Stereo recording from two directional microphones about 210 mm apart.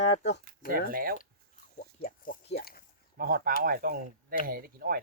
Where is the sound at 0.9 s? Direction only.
45° right (ahead or behind).